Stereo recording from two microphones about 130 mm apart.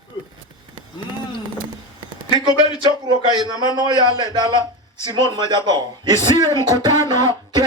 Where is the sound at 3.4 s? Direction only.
35° right (ahead or behind).